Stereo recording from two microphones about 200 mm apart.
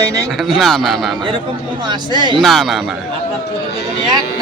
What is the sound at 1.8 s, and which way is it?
Speech, 20° right (ahead or behind).